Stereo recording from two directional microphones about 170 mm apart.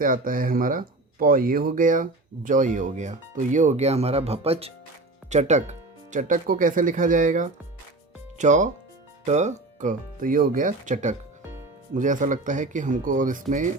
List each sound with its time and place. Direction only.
0.0 s speech: 55° right (ahead or behind)